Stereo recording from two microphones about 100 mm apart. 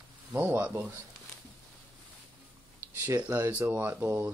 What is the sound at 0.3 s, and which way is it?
Speech, 15° right (ahead or behind).